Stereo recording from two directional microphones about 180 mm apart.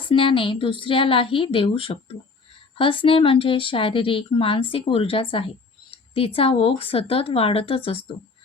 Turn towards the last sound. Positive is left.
turn(degrees=30)  # may be behind; listen again after turning